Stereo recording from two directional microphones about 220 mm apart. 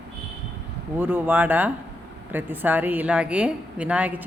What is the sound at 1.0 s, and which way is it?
Speech, 10° right (ahead or behind).